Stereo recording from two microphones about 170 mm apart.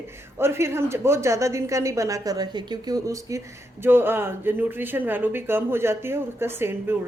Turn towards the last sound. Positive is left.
turn(degrees=-15)  # may be behind; listen again after turning